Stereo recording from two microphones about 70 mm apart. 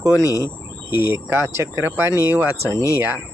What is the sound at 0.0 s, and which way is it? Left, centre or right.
Speech, right.